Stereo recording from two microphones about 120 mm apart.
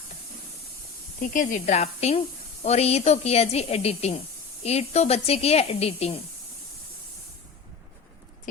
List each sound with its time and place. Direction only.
1.5 s speech: 80° left; by 6.1 s 60° left (ahead or behind)